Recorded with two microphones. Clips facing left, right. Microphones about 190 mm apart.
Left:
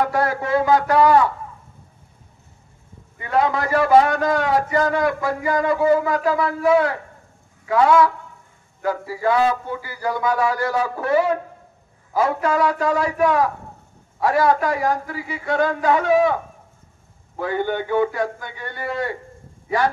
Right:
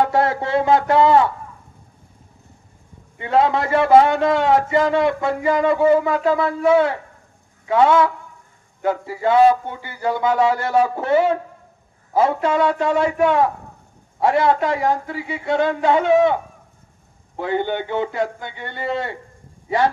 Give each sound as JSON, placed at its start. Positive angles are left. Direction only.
{"t": 0.0, "sound": "a man's voice", "side_deg": -25}
{"t": 3.2, "sound": "a man's voice", "side_deg": -25}
{"t": 17.4, "sound": "a man's voice", "side_deg": -25}